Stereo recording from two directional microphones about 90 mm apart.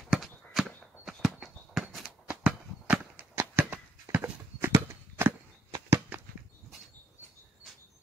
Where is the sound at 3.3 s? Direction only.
30° right (ahead or behind).